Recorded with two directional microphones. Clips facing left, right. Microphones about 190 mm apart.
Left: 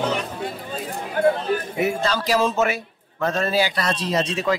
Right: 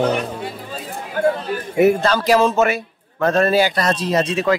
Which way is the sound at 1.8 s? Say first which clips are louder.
Right 9 dB; 55° right (ahead or behind).